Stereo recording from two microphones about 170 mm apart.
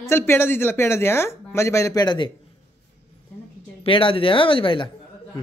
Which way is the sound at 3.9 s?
30° left (ahead or behind).